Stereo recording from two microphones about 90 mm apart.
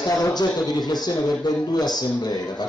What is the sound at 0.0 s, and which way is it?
Speech, 50° left (ahead or behind).